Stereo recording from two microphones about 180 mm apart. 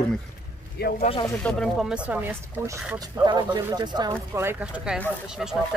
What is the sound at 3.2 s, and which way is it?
A man's voice, 25° right (ahead or behind).